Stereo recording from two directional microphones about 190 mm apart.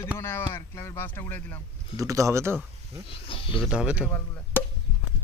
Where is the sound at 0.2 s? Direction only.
15° left (ahead or behind).